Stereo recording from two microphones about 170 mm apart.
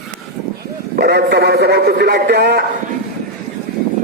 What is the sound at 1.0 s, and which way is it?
A man's voice, 70° right (ahead or behind).